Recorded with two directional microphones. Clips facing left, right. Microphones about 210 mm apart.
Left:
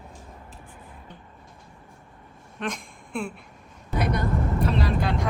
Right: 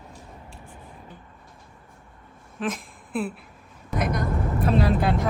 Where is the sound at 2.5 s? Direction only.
5° right (ahead or behind).